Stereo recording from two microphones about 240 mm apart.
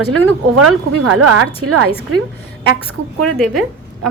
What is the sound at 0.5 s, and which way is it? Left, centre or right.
A woman's voice, right.